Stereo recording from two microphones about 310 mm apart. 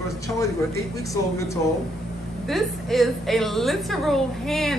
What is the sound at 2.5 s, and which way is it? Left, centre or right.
A woman's voice, centre.